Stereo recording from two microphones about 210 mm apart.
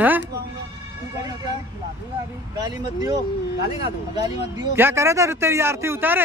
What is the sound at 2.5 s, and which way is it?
A man's voice, 20° right (ahead or behind).